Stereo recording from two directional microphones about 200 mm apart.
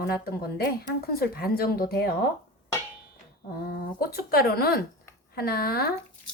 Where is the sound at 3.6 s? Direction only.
50° left (ahead or behind).